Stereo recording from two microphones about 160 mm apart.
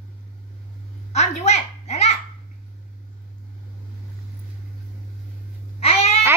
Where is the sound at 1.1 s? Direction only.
45° left (ahead or behind).